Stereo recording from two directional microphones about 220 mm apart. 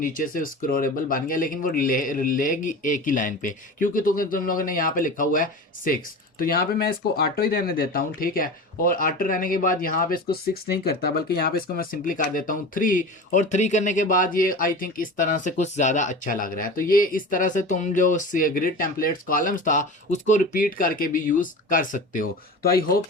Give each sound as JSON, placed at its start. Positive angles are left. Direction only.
{"t": 0.0, "sound": "speech", "side_deg": 40}